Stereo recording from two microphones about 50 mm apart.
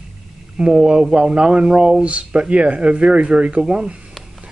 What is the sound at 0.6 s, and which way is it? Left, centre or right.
Speech, centre.